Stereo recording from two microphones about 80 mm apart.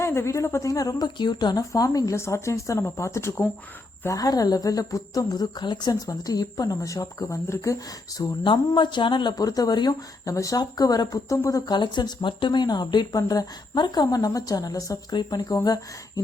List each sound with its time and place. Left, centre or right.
0.0 s speech: left
1.7 s speech: left
2.1 s speech: left
4.1 s speech: left
5.9 s speech: left
8.4 s speech: left
9.3 s speech: left
10.2 s speech: left
10.6 s speech: left
11.3 s speech: left
11.6 s speech: left
15.1 s speech: left
15.6 s speech: left